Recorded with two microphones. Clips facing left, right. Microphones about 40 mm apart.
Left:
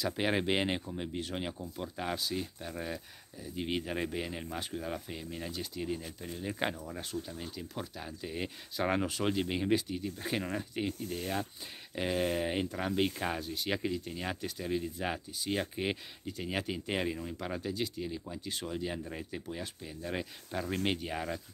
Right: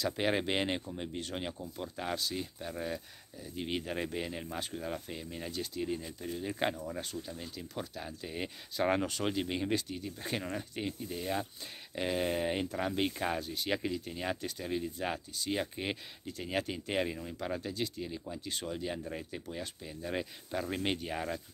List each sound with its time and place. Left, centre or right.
0.0 s speech: centre